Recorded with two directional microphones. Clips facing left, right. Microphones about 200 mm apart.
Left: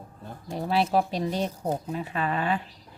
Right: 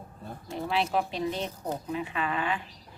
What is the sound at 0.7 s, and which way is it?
A woman's voice, 40° left (ahead or behind).